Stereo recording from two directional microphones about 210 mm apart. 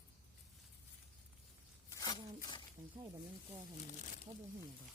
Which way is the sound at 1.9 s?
15° left (ahead or behind).